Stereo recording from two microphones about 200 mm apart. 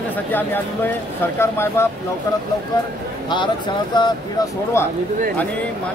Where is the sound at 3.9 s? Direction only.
20° left (ahead or behind).